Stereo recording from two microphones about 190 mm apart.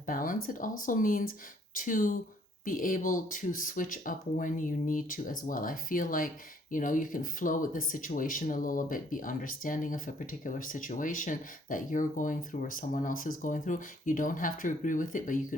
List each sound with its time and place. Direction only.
0.0 s speech: 45° left (ahead or behind)